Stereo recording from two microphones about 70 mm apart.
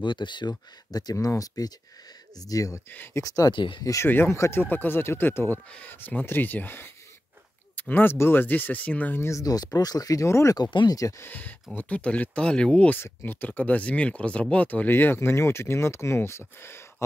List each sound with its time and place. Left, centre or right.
0.2 s speech: left
1.2 s speech: left
2.9 s speech: left
3.2 s speech: left
4.0 s speech: left
5.7 s speech: centre
7.9 s speech: left
9.2 s speech: left
10.2 s speech: left
10.5 s speech: left
11.1 s speech: left
13.0 s speech: left